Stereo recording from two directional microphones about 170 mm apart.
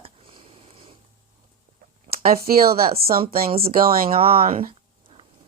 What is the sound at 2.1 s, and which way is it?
Speech, 60° right (ahead or behind).